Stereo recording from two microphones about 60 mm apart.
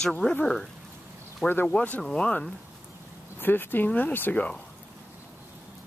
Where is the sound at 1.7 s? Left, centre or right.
Left.